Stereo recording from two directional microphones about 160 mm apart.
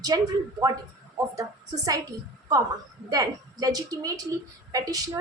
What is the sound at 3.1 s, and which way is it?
A woman's voice, 25° right (ahead or behind).